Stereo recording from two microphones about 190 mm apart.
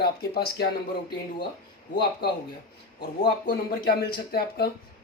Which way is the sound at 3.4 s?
55° left (ahead or behind).